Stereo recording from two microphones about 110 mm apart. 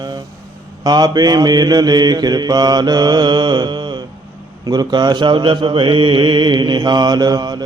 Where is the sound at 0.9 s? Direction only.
40° right (ahead or behind).